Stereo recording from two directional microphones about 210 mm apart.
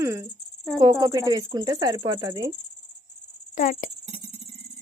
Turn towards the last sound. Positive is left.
turn(degrees=40)  # may be behind; listen again after turning